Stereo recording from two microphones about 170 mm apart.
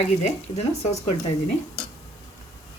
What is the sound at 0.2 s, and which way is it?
Speech, 40° left (ahead or behind).